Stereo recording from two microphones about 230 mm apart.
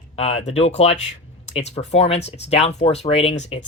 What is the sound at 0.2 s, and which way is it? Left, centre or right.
Speech, left.